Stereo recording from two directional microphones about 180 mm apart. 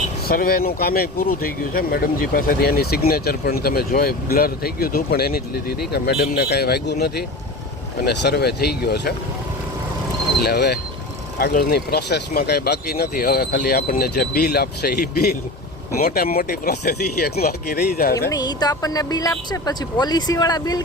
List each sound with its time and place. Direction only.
0.3 s speech: 55° left (ahead or behind)
10.4 s speech: 65° left (ahead or behind)
18.3 s speech: 20° left (ahead or behind)